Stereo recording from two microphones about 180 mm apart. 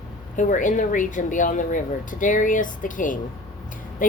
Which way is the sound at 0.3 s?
45° left (ahead or behind).